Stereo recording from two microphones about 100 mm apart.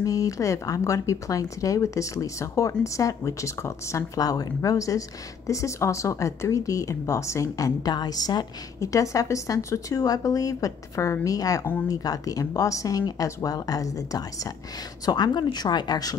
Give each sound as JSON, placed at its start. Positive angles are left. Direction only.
{"t": 0.0, "sound": "speech", "side_deg": 35}
{"t": 8.7, "sound": "speech", "side_deg": 30}